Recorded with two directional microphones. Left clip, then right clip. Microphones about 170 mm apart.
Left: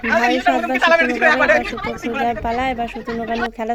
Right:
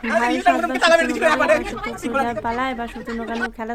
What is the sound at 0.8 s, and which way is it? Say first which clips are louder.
Speech: left 1 dB; 55° right (ahead or behind).